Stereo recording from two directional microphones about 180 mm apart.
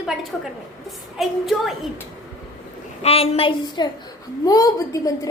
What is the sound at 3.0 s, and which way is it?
A woman's voice, 35° left (ahead or behind).